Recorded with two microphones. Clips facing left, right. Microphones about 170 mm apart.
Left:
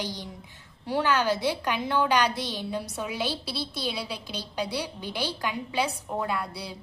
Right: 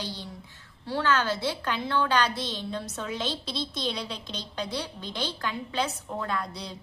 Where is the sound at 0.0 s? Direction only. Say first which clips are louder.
Left 2 dB; 15° left (ahead or behind).